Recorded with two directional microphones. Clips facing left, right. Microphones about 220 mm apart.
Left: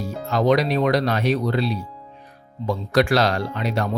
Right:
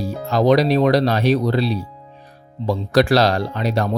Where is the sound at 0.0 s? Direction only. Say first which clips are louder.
Right 3 dB; 35° right (ahead or behind).